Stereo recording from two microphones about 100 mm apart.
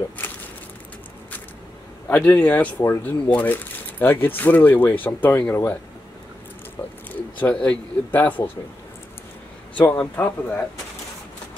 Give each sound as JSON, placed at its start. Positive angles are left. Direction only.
{"t": 2.0, "sound": "speech", "side_deg": 15}
{"t": 7.1, "sound": "a sound", "side_deg": 10}
{"t": 8.1, "sound": "speech", "side_deg": 15}
{"t": 9.8, "sound": "speech", "side_deg": 15}